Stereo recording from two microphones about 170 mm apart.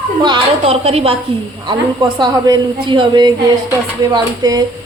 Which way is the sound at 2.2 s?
25° right (ahead or behind).